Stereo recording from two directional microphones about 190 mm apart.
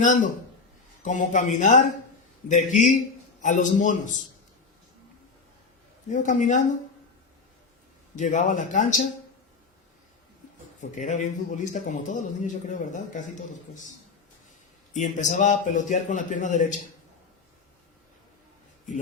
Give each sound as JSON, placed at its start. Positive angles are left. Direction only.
{"t": 0.0, "sound": "a man's voice", "side_deg": 40}
{"t": 6.1, "sound": "a man's voice", "side_deg": 40}
{"t": 8.1, "sound": "a man's voice", "side_deg": 40}
{"t": 10.8, "sound": "a man's voice", "side_deg": 40}
{"t": 14.9, "sound": "a man's voice", "side_deg": 40}